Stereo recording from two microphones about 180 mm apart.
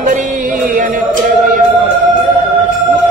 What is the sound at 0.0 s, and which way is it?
Music, 45° right (ahead or behind).